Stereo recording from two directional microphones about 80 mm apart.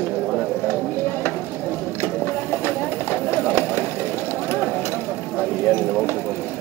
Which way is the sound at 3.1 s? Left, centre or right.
Left.